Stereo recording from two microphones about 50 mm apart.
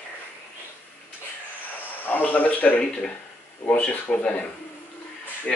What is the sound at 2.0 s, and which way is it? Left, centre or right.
Speech, left.